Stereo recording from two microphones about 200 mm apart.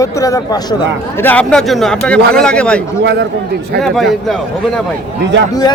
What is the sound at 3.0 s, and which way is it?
Speech, 55° right (ahead or behind).